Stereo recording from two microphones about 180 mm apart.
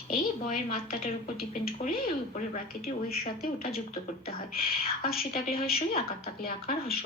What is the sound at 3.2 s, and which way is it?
A woman's voice, 55° left (ahead or behind).